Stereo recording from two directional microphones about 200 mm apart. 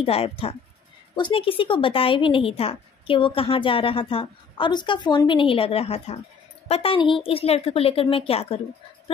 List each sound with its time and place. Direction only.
0.0 s a woman's voice: 30° left (ahead or behind)